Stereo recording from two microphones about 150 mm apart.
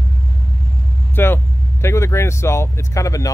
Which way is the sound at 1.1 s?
15° left (ahead or behind).